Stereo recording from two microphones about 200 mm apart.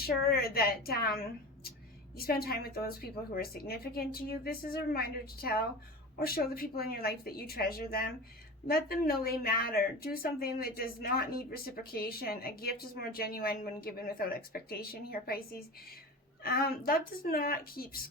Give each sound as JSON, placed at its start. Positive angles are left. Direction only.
{"t": 0.0, "sound": "speech", "side_deg": 50}
{"t": 16.4, "sound": "speech", "side_deg": 50}